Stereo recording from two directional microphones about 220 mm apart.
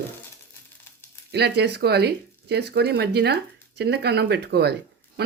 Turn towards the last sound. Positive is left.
turn(degrees=-45)  # may be behind; listen again after turning